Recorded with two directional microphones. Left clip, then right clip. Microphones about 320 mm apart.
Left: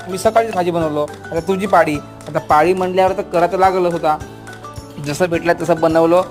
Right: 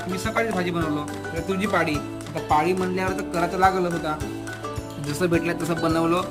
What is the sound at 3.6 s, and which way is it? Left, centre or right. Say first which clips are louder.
Speech: left 7 dB; centre.